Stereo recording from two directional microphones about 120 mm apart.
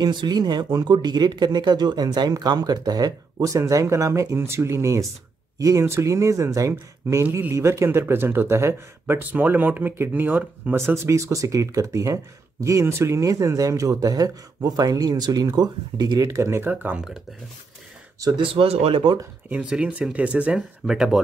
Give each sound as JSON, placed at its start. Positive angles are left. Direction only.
{"t": 0.0, "sound": "speech", "side_deg": -40}
{"t": 18.2, "sound": "speech", "side_deg": -40}
{"t": 19.5, "sound": "speech", "side_deg": -10}